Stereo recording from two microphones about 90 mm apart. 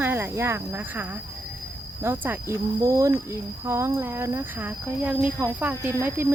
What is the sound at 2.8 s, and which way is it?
Speech, 35° right (ahead or behind).